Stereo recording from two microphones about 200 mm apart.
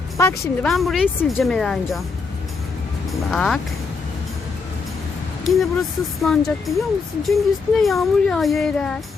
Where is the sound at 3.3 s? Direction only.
Centre (ahead or behind).